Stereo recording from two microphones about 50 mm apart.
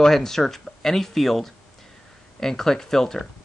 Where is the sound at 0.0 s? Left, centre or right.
Centre.